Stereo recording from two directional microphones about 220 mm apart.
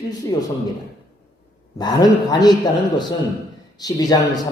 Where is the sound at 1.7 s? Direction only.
20° left (ahead or behind).